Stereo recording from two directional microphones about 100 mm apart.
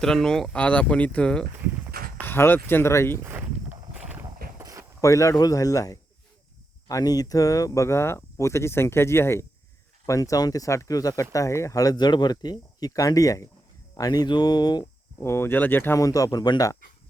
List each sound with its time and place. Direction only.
0.0 s speech: 5° left (ahead or behind)
2.2 s speech: 20° left (ahead or behind)
3.2 s a sound: 20° right (ahead or behind)
4.2 s clip-clop: 30° right (ahead or behind)
4.9 s speech: 30° left (ahead or behind)
15.2 s speech: 25° left (ahead or behind)
16.0 s speech: 35° left (ahead or behind)